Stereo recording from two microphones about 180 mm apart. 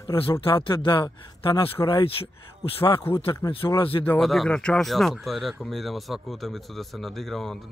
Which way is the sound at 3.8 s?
30° left (ahead or behind).